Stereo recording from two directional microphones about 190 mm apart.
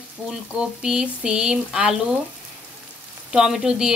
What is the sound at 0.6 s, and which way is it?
Speech, 5° right (ahead or behind).